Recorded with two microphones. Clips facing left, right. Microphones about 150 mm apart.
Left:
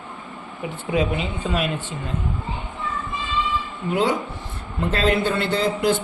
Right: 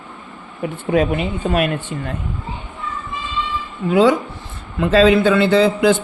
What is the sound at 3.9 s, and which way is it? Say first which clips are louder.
A man's voice: right 8 dB; 90° right.